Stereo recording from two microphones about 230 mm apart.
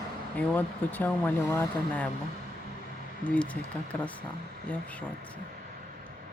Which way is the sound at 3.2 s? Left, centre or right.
Centre.